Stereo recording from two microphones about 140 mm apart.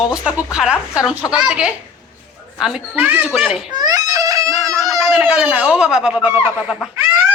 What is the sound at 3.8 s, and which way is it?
Baby cry, 25° right (ahead or behind).